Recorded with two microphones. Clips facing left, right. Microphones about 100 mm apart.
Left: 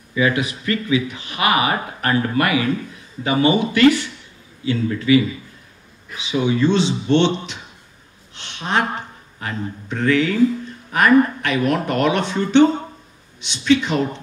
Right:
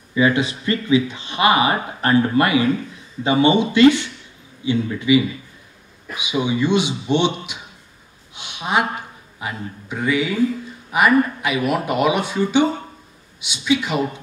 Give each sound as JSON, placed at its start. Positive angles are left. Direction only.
{"t": 0.1, "sound": "speech", "side_deg": -25}
{"t": 8.4, "sound": "a sound", "side_deg": -10}
{"t": 10.9, "sound": "speech", "side_deg": -10}